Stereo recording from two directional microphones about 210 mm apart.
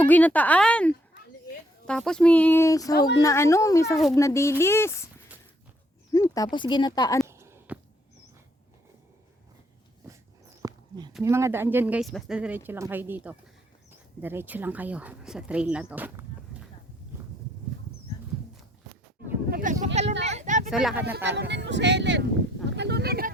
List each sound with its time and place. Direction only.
0.0 s speech: 5° left (ahead or behind)
6.1 s speech: 15° left (ahead or behind)
7.3 s a sound: 10° right (ahead or behind)
10.1 s dog: 15° right (ahead or behind)
11.2 s speech: 15° right (ahead or behind)
19.5 s speech: 45° right (ahead or behind)
20.2 s a sound: 35° right (ahead or behind)
20.7 s speech: centre (ahead or behind)
21.2 s speech: 55° right (ahead or behind)